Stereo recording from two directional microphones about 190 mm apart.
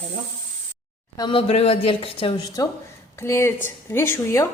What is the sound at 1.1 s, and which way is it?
Speech, 25° left (ahead or behind).